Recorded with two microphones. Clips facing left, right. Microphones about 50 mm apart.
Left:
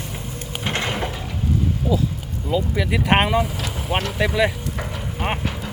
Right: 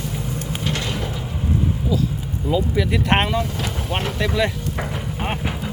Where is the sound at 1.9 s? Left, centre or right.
Centre.